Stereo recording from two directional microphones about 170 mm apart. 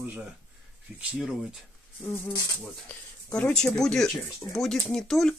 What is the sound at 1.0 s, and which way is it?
Speech, 5° right (ahead or behind).